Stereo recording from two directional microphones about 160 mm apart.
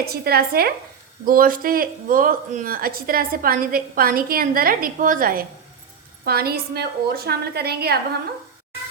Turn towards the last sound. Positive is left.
turn(degrees=-85)